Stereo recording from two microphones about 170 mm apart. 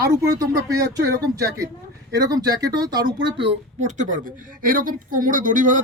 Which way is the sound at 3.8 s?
45° right (ahead or behind).